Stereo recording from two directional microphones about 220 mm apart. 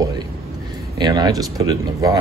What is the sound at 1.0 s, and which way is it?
Speech, 20° right (ahead or behind).